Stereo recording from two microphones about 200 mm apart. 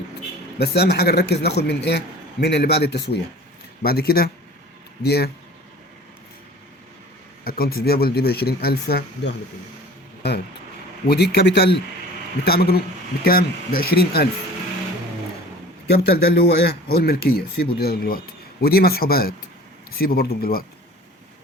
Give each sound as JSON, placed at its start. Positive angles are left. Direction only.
{"t": 0.6, "sound": "a man's voice", "side_deg": 55}
{"t": 7.4, "sound": "a man's voice", "side_deg": 50}
{"t": 15.9, "sound": "speech", "side_deg": 55}